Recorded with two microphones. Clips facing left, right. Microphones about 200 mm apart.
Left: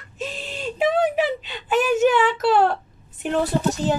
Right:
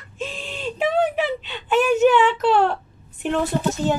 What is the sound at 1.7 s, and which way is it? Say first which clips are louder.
Speech: right 2 dB; 40° left (ahead or behind).